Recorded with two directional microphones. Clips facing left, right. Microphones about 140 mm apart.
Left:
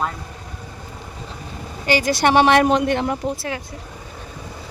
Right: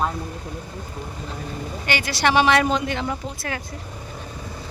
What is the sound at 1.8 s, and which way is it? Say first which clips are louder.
Speech: left 5 dB; 40° left (ahead or behind).